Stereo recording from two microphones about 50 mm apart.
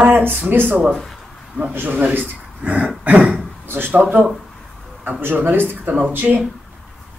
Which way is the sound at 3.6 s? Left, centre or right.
Right.